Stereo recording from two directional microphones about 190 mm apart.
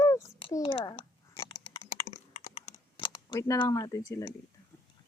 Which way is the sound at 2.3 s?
40° left (ahead or behind).